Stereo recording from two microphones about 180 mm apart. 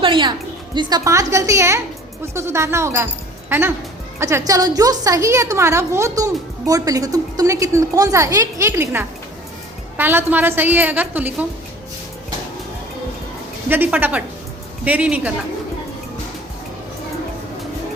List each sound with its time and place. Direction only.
0.0 s a woman's voice: 25° right (ahead or behind); by 11.4 s 10° right (ahead or behind)
13.7 s a woman's voice: 10° right (ahead or behind)